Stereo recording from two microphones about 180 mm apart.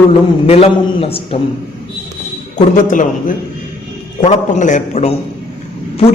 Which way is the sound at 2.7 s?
45° left (ahead or behind).